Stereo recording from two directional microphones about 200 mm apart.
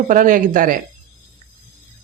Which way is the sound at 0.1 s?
40° right (ahead or behind).